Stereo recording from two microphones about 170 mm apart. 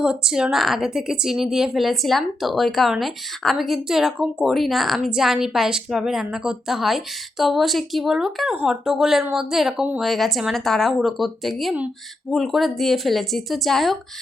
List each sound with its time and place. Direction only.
0.0 s speech: 5° right (ahead or behind)